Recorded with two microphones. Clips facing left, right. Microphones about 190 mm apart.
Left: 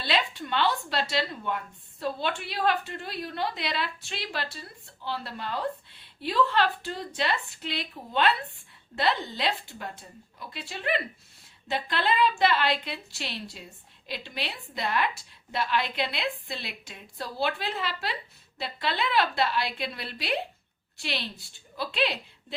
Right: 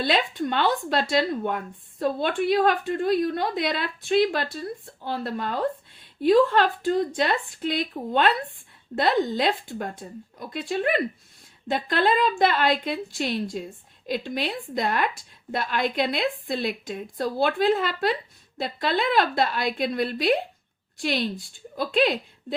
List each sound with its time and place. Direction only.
0.0 s speech: 45° right (ahead or behind)